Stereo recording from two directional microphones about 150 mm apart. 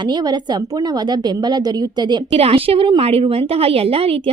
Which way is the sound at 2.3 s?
40° right (ahead or behind).